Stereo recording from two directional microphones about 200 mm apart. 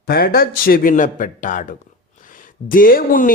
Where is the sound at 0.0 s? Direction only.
50° left (ahead or behind).